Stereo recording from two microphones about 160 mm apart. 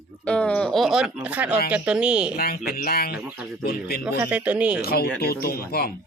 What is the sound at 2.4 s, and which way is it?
Speech, 70° left (ahead or behind).